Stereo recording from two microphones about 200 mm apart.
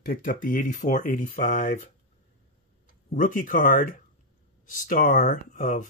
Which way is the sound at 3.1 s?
40° left (ahead or behind).